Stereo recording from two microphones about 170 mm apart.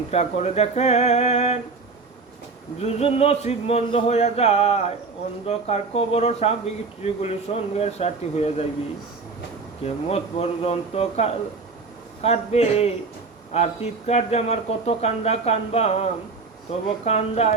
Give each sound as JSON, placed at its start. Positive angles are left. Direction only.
{"t": 0.1, "sound": "speech", "side_deg": 40}
{"t": 2.8, "sound": "speech", "side_deg": 35}
{"t": 9.8, "sound": "speech", "side_deg": 40}